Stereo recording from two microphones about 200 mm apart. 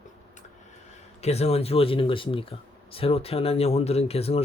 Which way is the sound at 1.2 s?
30° left (ahead or behind).